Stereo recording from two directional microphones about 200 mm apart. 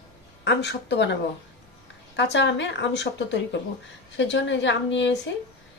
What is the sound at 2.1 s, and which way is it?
A woman's voice, 60° left (ahead or behind).